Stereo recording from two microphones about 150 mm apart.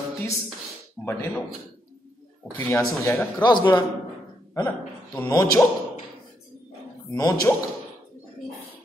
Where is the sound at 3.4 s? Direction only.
30° left (ahead or behind).